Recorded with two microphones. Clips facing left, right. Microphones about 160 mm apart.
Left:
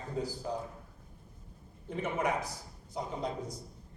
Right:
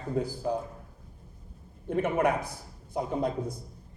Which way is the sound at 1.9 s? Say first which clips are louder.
Right 6 dB; 55° right (ahead or behind).